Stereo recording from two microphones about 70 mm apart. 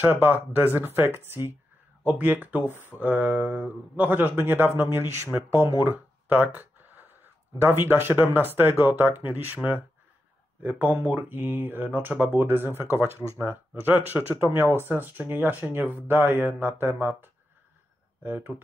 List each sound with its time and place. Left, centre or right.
0.0 s speech: right
2.0 s speech: right
5.3 s speech: right
5.9 s a sound: right
7.6 s speech: right
18.2 s speech: right